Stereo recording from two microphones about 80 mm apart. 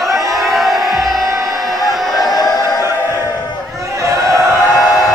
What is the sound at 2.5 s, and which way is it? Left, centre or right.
Music, left.